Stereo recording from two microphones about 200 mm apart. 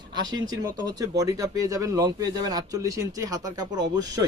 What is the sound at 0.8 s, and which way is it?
Speech, 20° right (ahead or behind).